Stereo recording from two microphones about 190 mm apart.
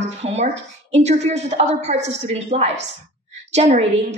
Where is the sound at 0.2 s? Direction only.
35° right (ahead or behind).